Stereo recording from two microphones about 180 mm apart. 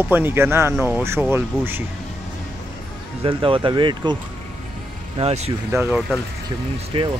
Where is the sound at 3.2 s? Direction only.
30° right (ahead or behind).